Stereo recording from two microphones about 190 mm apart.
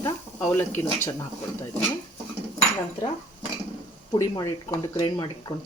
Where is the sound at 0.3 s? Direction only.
10° left (ahead or behind).